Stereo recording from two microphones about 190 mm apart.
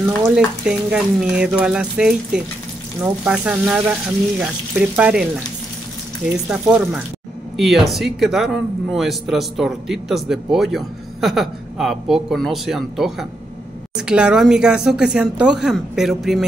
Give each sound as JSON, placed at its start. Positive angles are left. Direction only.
{"t": 0.4, "sound": "speech", "side_deg": -5}
{"t": 6.5, "sound": "speech", "side_deg": -5}